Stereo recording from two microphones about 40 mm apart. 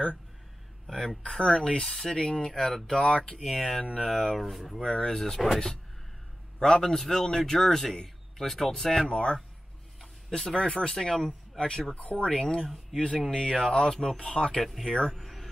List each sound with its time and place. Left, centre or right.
0.8 s a man's voice: centre
1.8 s a man's voice: centre
4.8 s a man's voice: centre
6.6 s a man's voice: centre
9.1 s a man's voice: left
11.2 s speech: left
12.3 s a man's voice: centre
12.6 s speech: centre
13.3 s a man's voice: centre
15.1 s a sound: centre